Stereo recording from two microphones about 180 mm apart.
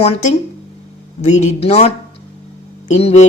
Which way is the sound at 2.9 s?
35° left (ahead or behind).